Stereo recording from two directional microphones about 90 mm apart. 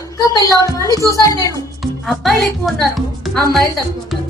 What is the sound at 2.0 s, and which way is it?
A woman's voice, centre (ahead or behind).